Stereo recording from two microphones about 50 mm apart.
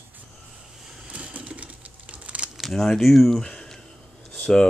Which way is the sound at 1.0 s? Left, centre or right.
Right.